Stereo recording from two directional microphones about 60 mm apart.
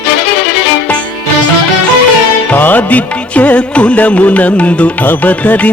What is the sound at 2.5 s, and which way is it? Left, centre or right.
Music, left.